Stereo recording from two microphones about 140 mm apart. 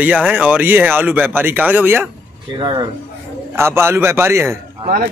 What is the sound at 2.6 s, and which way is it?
Speech, 30° right (ahead or behind).